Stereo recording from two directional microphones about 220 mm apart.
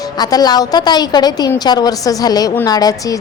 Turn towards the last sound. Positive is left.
turn(degrees=15)  # may be behind; listen again after turning